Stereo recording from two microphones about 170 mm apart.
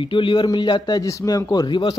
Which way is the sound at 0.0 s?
30° left (ahead or behind).